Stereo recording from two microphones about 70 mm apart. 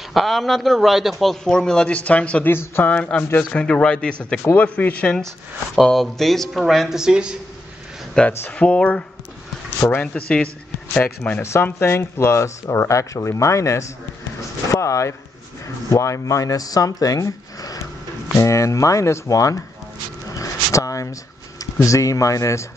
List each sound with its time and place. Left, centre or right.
0.1 s a man's voice: centre
2.5 s speech: left
2.9 s speech: centre
5.8 s a man's voice: centre
8.3 s speech: left
8.5 s speech: centre
11.4 s speech: left
18.3 s speech: left
20.3 s a sound: left